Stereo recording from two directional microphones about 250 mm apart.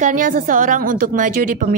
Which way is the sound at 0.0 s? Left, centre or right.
Right.